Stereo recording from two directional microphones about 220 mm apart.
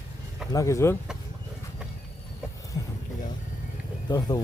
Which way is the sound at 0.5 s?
15° left (ahead or behind).